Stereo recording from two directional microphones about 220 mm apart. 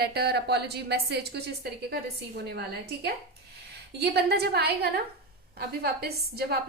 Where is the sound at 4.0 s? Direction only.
50° right (ahead or behind).